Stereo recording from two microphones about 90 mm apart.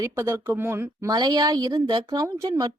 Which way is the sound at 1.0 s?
50° right (ahead or behind).